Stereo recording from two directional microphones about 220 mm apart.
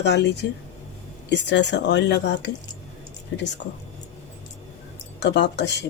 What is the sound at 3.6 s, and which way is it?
Speech, 50° left (ahead or behind).